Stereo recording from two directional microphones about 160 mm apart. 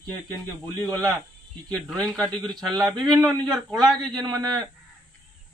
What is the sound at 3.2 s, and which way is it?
A man's voice, 25° right (ahead or behind).